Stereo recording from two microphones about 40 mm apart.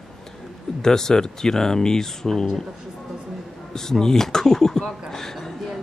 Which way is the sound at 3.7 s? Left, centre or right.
Centre.